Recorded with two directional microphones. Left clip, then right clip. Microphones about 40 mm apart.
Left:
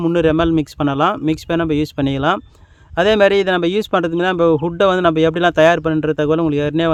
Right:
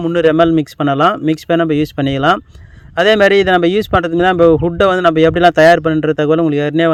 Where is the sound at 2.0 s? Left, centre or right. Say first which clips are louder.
Right 6 dB; right.